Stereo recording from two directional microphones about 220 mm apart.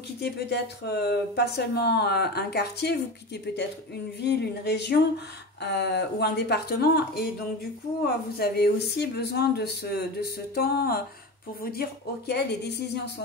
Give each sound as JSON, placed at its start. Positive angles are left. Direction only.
{"t": 0.2, "sound": "speech", "side_deg": 50}
{"t": 8.4, "sound": "speech", "side_deg": 45}